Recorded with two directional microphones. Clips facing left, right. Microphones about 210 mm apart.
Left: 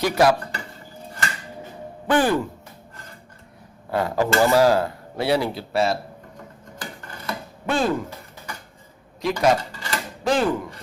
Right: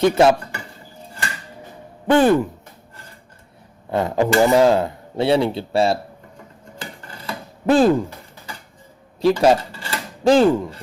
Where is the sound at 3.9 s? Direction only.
20° right (ahead or behind).